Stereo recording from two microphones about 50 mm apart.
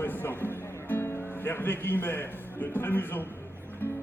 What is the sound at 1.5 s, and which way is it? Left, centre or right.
A man's voice, left.